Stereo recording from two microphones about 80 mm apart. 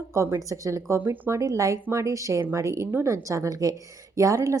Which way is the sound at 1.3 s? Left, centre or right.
Right.